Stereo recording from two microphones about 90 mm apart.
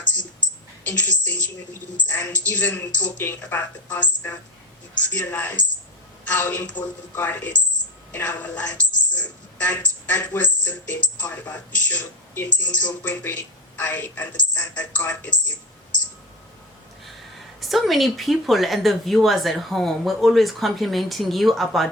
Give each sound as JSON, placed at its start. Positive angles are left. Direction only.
{"t": 0.9, "sound": "a woman's voice", "side_deg": 20}
{"t": 17.1, "sound": "speech", "side_deg": 0}